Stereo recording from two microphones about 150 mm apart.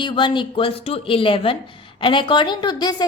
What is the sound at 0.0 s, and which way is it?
A woman's voice, 35° left (ahead or behind).